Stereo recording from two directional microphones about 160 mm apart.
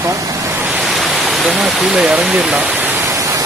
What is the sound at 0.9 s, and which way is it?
Speech, centre (ahead or behind).